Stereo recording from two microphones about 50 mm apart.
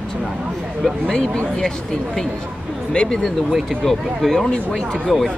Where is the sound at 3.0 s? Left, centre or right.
Centre.